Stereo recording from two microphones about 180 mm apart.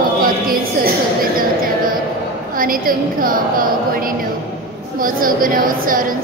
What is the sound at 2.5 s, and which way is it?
A woman's voice, 50° right (ahead or behind).